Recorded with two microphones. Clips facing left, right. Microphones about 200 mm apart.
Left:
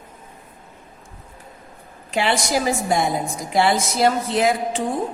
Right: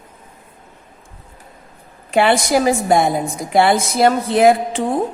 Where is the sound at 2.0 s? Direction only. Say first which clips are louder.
Right 6 dB; 55° right (ahead or behind).